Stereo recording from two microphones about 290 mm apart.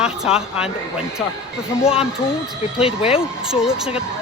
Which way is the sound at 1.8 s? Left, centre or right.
Centre.